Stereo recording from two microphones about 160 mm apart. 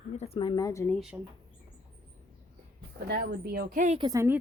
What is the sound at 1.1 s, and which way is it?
Speech, 15° right (ahead or behind).